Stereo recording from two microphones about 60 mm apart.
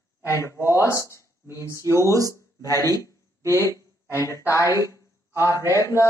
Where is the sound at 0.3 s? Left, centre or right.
Left.